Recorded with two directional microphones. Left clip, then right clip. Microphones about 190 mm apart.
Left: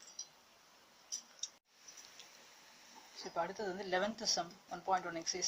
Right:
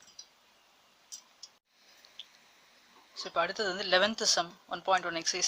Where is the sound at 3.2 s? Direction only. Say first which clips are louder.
Right 9 dB; 35° right (ahead or behind).